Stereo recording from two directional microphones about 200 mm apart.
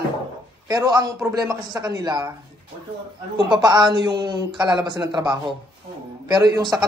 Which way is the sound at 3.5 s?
20° right (ahead or behind).